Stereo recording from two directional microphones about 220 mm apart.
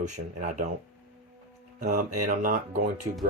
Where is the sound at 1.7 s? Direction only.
35° right (ahead or behind).